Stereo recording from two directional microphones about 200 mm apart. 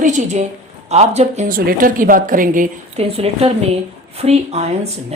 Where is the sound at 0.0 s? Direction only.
35° right (ahead or behind).